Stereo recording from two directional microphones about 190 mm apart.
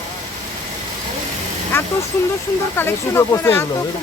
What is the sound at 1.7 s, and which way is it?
Speech, 10° left (ahead or behind).